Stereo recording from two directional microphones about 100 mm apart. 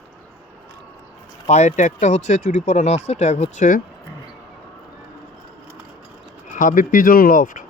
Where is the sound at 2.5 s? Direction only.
90° left.